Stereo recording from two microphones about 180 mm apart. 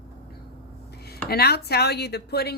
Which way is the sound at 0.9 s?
60° left (ahead or behind).